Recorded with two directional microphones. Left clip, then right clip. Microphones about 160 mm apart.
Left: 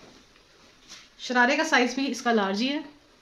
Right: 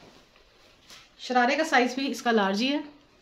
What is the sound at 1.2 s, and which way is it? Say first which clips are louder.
Speech: left 1 dB; 25° left (ahead or behind).